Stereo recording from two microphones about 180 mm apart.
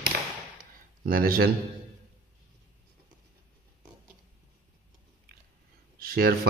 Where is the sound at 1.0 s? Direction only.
55° right (ahead or behind).